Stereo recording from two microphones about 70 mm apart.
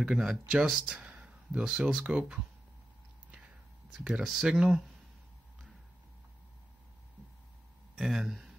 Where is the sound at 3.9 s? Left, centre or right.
Centre.